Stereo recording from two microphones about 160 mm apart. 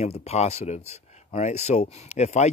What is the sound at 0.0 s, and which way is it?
Speech, 40° left (ahead or behind).